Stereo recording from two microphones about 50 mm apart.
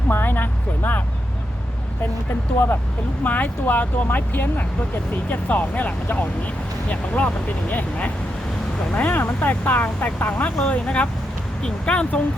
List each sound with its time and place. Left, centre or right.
0.1 s speech: left
3.2 s speech: left